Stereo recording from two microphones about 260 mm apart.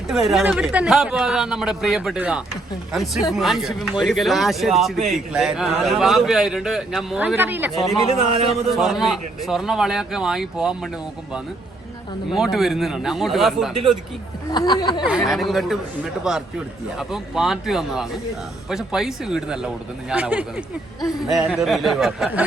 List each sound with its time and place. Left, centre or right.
0.3 s a man's voice: centre
8.3 s a man's voice: right
8.7 s a man's voice: centre
12.3 s a man's voice: centre
14.5 s speech: centre
15.3 s a man's voice: centre